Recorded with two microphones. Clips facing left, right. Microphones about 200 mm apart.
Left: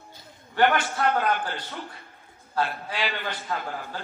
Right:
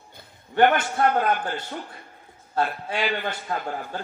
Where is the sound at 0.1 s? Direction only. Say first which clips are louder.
Right 9 dB; 50° right (ahead or behind).